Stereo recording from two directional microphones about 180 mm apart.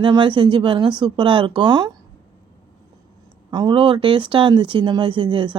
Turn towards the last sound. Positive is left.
turn(degrees=-25)  # may be behind; listen again after turning